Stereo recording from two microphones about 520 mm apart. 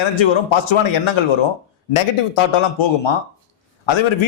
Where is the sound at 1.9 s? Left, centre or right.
Left.